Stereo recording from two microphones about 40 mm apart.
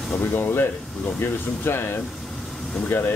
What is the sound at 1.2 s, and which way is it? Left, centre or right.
Speech, left.